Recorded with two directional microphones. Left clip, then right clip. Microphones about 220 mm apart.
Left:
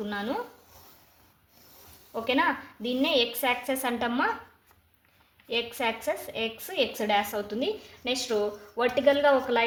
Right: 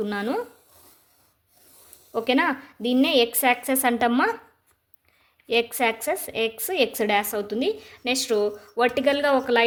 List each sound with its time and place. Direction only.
0.0 s a woman's voice: 50° right (ahead or behind)
2.1 s a woman's voice: 55° right (ahead or behind)
5.5 s a woman's voice: 50° right (ahead or behind)